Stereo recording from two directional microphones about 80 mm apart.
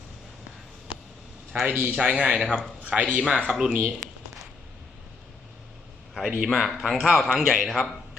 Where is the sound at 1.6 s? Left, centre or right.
Right; by 3.7 s centre.